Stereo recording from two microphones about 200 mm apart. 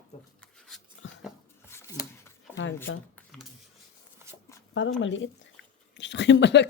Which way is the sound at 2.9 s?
75° left (ahead or behind).